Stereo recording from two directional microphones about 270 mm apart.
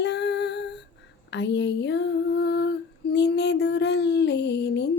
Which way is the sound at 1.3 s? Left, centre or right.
Left.